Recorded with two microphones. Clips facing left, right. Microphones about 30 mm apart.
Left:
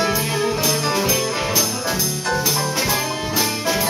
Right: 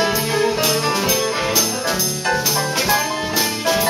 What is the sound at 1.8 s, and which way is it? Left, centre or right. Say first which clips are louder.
Music: right 2 dB; right.